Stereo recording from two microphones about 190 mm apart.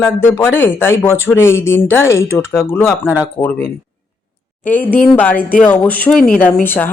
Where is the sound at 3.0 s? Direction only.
5° right (ahead or behind).